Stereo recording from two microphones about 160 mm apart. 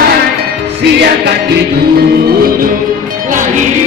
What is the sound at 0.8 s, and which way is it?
Music, 90° right.